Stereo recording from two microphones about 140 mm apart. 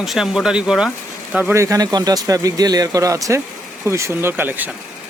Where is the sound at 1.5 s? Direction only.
25° right (ahead or behind).